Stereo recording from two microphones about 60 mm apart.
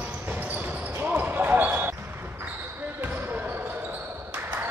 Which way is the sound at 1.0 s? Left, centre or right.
Right.